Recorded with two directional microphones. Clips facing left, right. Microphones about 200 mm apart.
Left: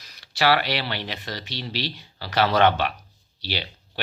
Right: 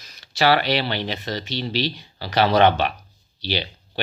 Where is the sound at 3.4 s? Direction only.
20° right (ahead or behind).